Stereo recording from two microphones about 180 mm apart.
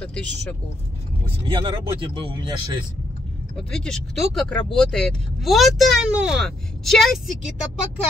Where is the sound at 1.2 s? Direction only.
30° right (ahead or behind).